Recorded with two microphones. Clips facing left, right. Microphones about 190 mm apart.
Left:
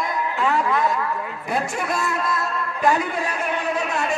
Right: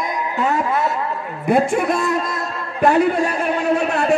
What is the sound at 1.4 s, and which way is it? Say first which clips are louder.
A woman's voice: right 10 dB; 55° right (ahead or behind).